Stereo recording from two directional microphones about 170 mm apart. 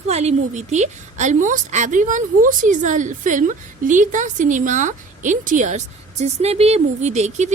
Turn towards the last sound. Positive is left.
turn(degrees=-40)  # may be behind; listen again after turning